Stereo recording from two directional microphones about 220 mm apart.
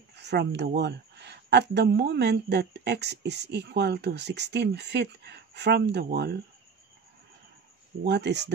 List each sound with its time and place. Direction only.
0.1 s speech: 50° right (ahead or behind)
8.0 s speech: 50° right (ahead or behind)